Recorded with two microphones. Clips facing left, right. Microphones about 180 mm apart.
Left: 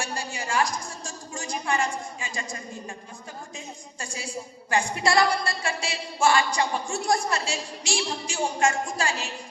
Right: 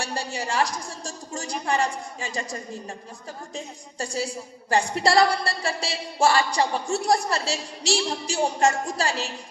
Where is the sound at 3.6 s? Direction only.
35° right (ahead or behind).